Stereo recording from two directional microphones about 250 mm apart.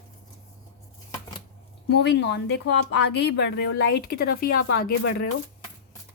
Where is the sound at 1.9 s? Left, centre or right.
Left.